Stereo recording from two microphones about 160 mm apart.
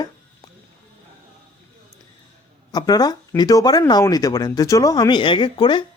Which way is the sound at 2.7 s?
25° left (ahead or behind).